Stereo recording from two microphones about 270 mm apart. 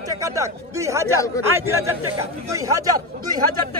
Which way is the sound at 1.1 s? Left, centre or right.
Centre.